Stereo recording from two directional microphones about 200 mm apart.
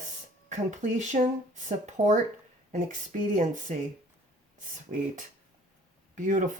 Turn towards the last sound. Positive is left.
turn(degrees=-40)  # may be behind; listen again after turning